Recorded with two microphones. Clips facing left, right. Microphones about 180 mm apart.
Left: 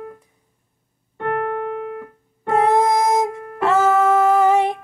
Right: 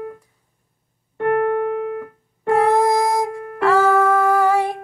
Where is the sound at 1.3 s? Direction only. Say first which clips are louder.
Right 5 dB; 50° right (ahead or behind).